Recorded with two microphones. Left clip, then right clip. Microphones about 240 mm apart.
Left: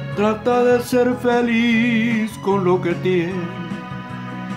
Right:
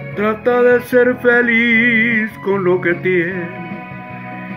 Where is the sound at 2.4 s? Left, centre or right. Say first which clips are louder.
Even; centre.